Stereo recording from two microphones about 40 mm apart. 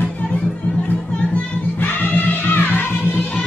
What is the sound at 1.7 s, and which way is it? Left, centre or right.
Music, left.